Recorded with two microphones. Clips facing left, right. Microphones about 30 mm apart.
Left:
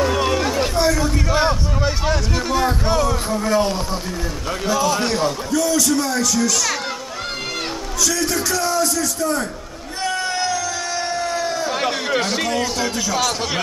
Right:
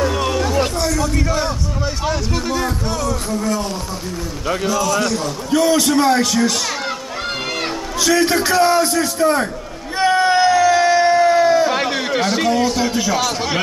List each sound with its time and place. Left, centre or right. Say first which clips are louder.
0.0 s a sound: even; centre
1.3 s a man's voice: left 2 dB; centre
2.0 s speech: right 1 dB; centre
2.5 s speech: left 6 dB; centre
5.5 s a man's voice: right 6 dB; right
8.0 s a man's voice: right 6 dB; right
10.0 s a sound: right 8 dB; right
11.8 s speech: right 2 dB; centre